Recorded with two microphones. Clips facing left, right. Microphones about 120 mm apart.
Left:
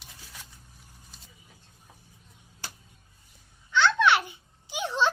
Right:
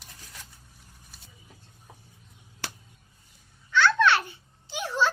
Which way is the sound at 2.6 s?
80° right.